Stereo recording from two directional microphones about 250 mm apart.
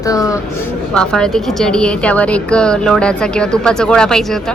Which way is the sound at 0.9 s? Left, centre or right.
Centre.